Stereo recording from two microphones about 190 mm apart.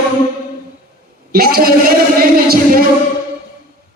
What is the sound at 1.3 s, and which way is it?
Speech, 50° right (ahead or behind).